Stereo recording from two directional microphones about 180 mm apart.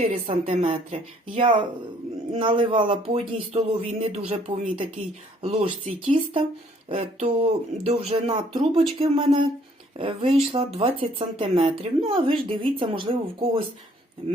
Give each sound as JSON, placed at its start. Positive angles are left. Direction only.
{"t": 0.0, "sound": "speech", "side_deg": -30}
{"t": 6.8, "sound": "speech", "side_deg": -35}